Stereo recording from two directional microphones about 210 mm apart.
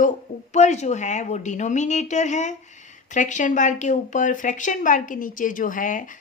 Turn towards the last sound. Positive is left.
turn(degrees=40)  # may be behind; listen again after turning